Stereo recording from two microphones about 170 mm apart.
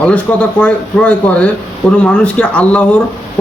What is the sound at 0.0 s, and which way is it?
Speech, 10° left (ahead or behind).